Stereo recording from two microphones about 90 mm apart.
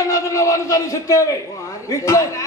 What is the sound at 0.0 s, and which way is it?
A man's voice, 35° left (ahead or behind).